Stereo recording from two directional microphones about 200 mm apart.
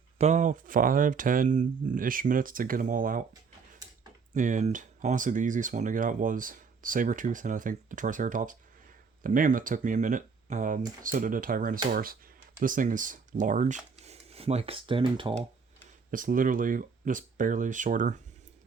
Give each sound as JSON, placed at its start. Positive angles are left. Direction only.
{"t": 0.2, "sound": "speech", "side_deg": -35}
{"t": 4.4, "sound": "speech", "side_deg": -40}
{"t": 16.1, "sound": "speech", "side_deg": -40}